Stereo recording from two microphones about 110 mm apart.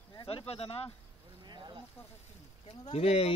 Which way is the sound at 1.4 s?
45° right (ahead or behind).